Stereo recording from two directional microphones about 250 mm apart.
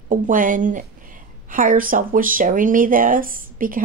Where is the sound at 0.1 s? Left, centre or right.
Right.